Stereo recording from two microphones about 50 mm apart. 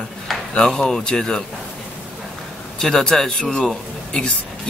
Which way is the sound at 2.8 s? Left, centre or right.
Centre.